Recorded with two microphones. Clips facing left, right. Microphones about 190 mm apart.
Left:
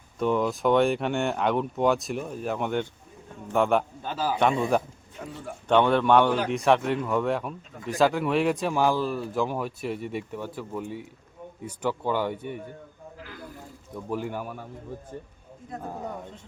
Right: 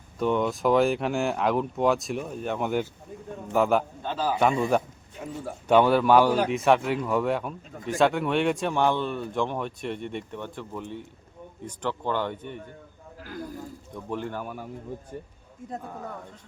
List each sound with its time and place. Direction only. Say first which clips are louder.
0.2 s a man's voice: even; centre (ahead or behind)
13.9 s a man's voice: left 2 dB; 5° left (ahead or behind)
16.0 s a man's voice: left 3 dB; 15° left (ahead or behind)